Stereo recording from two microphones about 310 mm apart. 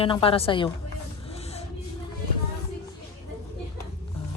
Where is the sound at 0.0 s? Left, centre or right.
Centre.